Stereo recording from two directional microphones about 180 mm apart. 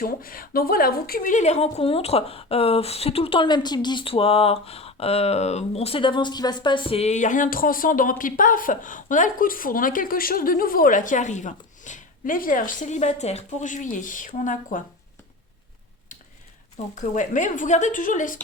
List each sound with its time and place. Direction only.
0.0 s a woman's voice: 55° left (ahead or behind)
16.9 s a woman's voice: 45° left (ahead or behind)